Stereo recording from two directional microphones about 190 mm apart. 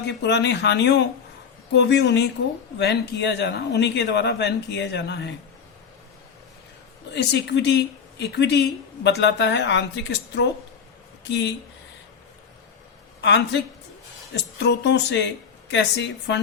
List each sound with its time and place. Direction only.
0.0 s speech: 60° left (ahead or behind)
7.1 s speech: 60° left (ahead or behind)
13.2 s speech: 65° left (ahead or behind)
14.6 s speech: 65° left (ahead or behind)